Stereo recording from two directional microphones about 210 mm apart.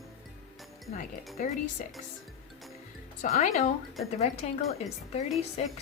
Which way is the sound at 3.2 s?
30° left (ahead or behind).